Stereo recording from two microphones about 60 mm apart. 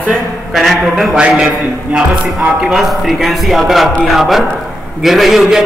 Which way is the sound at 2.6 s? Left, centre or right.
Centre.